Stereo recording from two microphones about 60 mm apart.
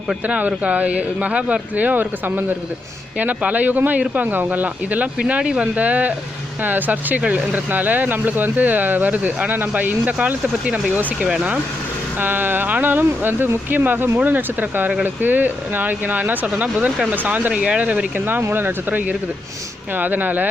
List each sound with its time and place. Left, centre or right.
0.3 s speech: right